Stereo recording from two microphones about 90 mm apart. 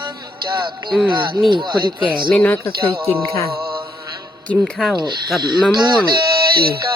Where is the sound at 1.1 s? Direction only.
55° right (ahead or behind).